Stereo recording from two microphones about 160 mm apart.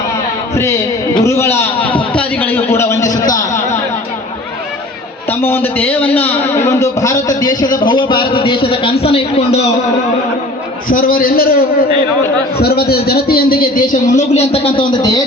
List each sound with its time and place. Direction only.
0.5 s a sound: 15° left (ahead or behind)
1.1 s a man's voice: 20° left (ahead or behind)
5.3 s a man's voice: 15° left (ahead or behind); by 9.6 s 40° left (ahead or behind)
10.8 s a man's voice: 65° left (ahead or behind)
12.5 s a man's voice: 75° left (ahead or behind); by 14.3 s 60° left (ahead or behind)
14.3 s a man's voice: 35° left (ahead or behind)